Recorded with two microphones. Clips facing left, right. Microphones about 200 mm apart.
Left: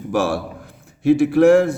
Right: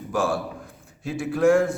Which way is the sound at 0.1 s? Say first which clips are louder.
Left 4 dB; 75° left (ahead or behind).